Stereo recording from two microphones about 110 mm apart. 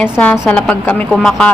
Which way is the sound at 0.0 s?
10° left (ahead or behind).